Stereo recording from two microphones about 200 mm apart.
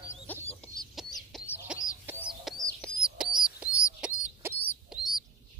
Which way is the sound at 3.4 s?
5° right (ahead or behind).